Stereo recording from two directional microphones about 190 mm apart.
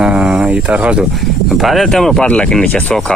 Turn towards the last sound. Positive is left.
turn(degrees=5)  # may be behind; listen again after turning